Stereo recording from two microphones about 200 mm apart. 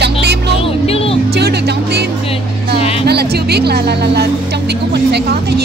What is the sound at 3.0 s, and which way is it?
Music, 55° right (ahead or behind).